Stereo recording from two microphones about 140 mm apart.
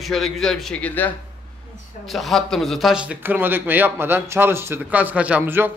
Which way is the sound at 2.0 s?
Centre (ahead or behind).